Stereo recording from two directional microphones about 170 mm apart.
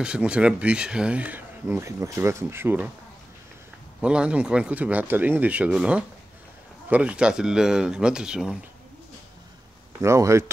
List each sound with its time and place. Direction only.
0.0 s speech: 5° right (ahead or behind)
4.0 s speech: 5° right (ahead or behind)
10.0 s speech: 15° right (ahead or behind)